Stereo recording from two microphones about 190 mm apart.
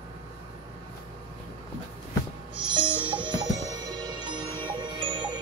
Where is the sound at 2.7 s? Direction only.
25° right (ahead or behind).